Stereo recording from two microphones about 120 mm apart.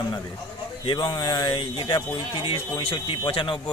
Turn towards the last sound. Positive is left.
turn(degrees=45)  # may be behind; listen again after turning